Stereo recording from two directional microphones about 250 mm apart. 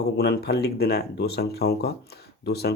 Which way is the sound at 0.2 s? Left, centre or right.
Left.